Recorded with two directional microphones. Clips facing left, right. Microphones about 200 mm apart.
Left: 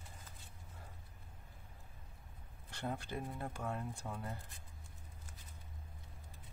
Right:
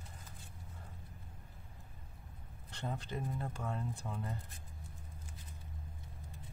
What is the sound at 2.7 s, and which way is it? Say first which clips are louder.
Speech: even; 10° left (ahead or behind).